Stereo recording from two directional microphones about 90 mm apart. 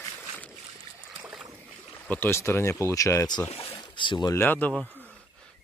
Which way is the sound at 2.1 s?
25° left (ahead or behind).